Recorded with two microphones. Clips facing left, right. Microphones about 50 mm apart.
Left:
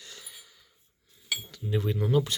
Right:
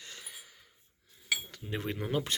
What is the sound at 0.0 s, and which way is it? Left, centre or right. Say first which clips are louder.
Gasp: even; right.